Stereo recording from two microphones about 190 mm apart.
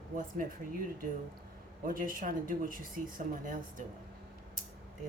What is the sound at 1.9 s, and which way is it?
Speech, 45° right (ahead or behind).